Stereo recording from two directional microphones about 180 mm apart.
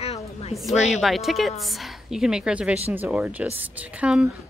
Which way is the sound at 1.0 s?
Centre (ahead or behind).